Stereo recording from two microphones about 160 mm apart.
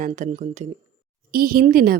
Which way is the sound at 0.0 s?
50° right (ahead or behind).